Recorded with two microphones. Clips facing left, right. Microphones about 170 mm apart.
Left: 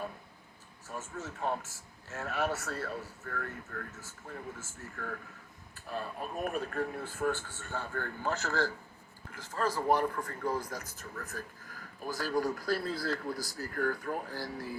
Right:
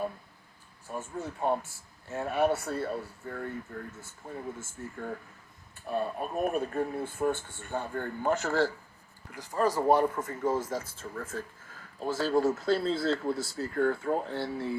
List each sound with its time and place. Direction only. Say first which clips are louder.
0.9 s speech: right 5 dB; 15° right (ahead or behind)
9.7 s speech: right 4 dB; 25° right (ahead or behind)